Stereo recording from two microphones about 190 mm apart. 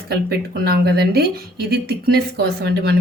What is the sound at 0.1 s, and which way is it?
A woman's voice, 55° right (ahead or behind).